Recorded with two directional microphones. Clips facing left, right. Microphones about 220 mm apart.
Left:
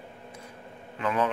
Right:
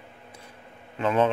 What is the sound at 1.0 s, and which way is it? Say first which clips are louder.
Speech: right 5 dB; 25° right (ahead or behind).